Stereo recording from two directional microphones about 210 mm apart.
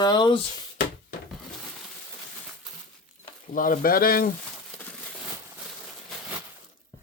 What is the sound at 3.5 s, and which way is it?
Speech, 40° left (ahead or behind).